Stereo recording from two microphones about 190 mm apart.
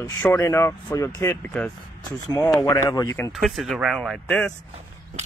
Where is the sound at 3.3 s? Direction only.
Centre (ahead or behind).